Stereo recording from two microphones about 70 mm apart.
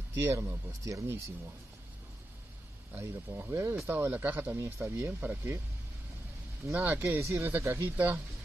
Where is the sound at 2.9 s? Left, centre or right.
Right.